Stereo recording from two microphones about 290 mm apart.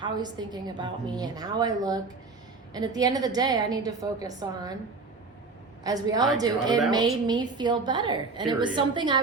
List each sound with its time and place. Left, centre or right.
0.0 s a woman's voice: centre
5.8 s a woman's voice: centre